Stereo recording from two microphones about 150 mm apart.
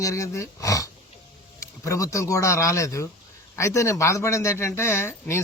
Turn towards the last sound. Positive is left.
turn(degrees=15)  # may be behind; listen again after turning